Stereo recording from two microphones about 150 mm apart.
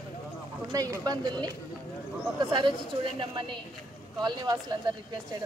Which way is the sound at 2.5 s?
35° right (ahead or behind).